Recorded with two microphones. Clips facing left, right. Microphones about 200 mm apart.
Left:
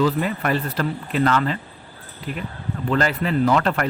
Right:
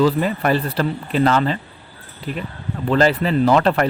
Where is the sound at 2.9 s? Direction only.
30° right (ahead or behind).